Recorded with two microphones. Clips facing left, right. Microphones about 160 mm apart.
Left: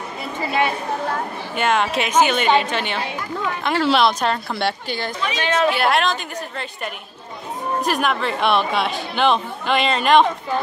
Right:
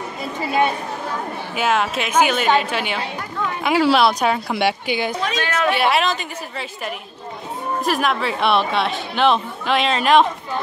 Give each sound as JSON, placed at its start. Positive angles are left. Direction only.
{"t": 1.5, "sound": "a woman's voice", "side_deg": -5}
{"t": 5.4, "sound": "speech", "side_deg": 25}
{"t": 5.7, "sound": "speech", "side_deg": 0}